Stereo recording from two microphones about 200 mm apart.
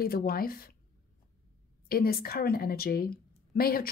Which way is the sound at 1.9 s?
50° left (ahead or behind).